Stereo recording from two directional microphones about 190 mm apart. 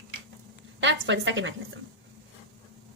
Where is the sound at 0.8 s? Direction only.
75° right (ahead or behind).